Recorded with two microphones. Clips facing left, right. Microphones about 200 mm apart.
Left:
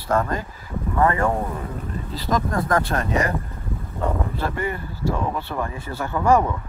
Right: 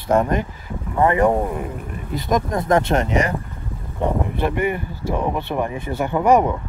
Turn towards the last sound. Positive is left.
turn(degrees=-20)  # may be behind; listen again after turning